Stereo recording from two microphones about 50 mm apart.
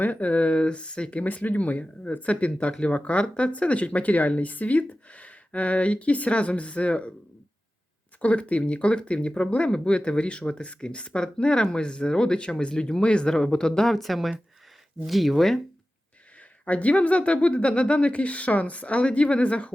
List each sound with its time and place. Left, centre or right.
0.0 s speech: left
1.5 s speech: left
8.2 s speech: left; by 15.6 s centre
16.4 s speech: left